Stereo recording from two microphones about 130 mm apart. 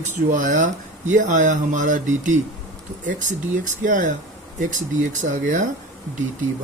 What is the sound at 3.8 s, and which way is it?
Speech, 90° right.